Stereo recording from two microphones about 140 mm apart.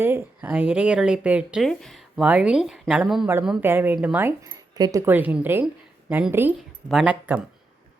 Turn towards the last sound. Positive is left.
turn(degrees=-10)  # may be behind; listen again after turning